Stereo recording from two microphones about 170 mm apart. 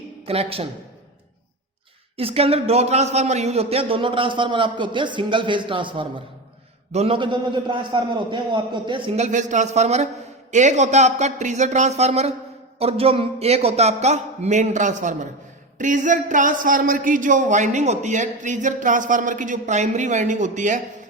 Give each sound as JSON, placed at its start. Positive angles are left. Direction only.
{"t": 0.3, "sound": "a man's voice", "side_deg": -35}
{"t": 2.1, "sound": "a man's voice", "side_deg": -35}
{"t": 9.2, "sound": "a man's voice", "side_deg": -45}